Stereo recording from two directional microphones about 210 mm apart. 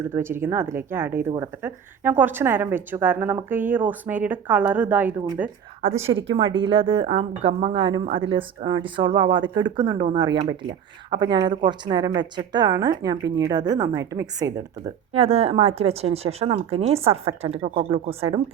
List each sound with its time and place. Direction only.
0.0 s a woman's voice: 10° right (ahead or behind)
5.8 s a woman's voice: 35° right (ahead or behind); by 14.5 s 15° right (ahead or behind)
15.1 s speech: 30° right (ahead or behind)